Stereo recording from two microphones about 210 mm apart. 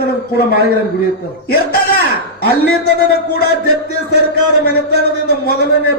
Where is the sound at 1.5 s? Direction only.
50° left (ahead or behind).